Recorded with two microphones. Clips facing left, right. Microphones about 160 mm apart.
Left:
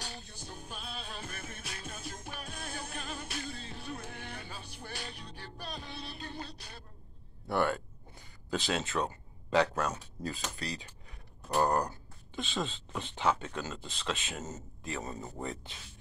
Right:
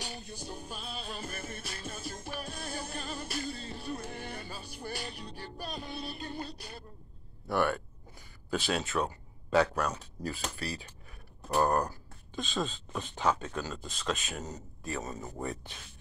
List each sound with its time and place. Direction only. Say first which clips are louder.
0.0 s music: right 4 dB; 15° right (ahead or behind)
7.4 s speech: right 1 dB; 25° left (ahead or behind)